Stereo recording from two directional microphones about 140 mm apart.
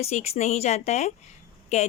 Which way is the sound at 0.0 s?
50° left (ahead or behind).